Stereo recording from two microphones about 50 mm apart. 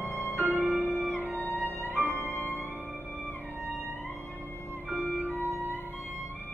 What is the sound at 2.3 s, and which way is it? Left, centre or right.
Music, left.